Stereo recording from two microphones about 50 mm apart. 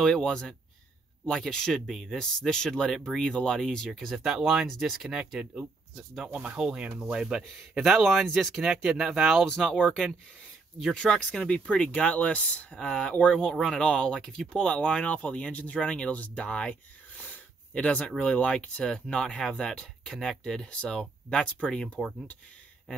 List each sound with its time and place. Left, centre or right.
0.0 s speech: centre
1.9 s speech: centre
2.1 s speech: centre
4.1 s speech: centre
5.1 s speech: centre
6.2 s speech: right; by 8.7 s centre
8.8 s speech: centre
9.5 s speech: centre
11.0 s speech: centre
12.7 s speech: centre
13.5 s speech: centre
16.2 s a sound: left
17.8 s speech: left